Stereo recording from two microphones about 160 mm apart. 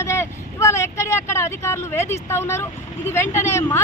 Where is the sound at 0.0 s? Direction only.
15° left (ahead or behind).